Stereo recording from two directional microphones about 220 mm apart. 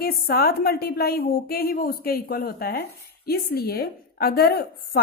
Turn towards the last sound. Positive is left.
turn(degrees=45)  # may be behind; listen again after turning